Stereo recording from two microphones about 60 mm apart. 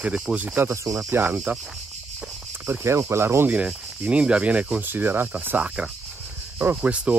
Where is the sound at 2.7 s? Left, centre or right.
Right.